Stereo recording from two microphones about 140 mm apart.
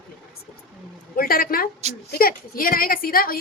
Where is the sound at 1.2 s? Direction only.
90° left.